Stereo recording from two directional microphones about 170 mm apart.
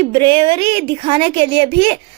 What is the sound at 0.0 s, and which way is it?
A woman's voice, 30° right (ahead or behind).